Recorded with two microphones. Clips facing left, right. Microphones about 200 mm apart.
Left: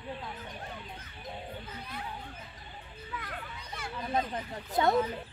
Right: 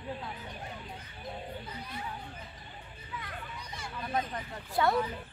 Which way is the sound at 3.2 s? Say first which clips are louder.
Left 1 dB; 55° left (ahead or behind).